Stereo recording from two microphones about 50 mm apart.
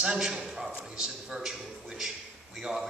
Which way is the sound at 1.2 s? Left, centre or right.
Centre.